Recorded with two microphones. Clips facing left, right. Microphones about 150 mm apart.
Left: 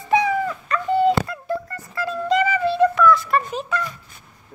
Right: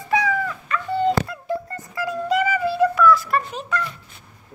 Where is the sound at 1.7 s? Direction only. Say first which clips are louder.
Even; 15° right (ahead or behind); by 3.8 s centre (ahead or behind).